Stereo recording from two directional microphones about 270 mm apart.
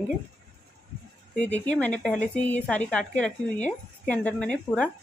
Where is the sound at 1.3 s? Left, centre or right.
Centre.